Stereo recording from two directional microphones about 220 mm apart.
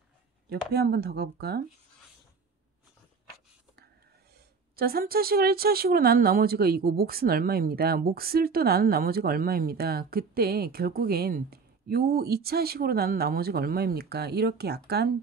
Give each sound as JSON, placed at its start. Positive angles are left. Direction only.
{"t": 0.5, "sound": "speech", "side_deg": -45}
{"t": 4.7, "sound": "speech", "side_deg": -45}